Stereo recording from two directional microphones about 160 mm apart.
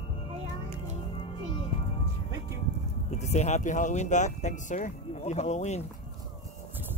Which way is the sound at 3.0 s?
45° left (ahead or behind).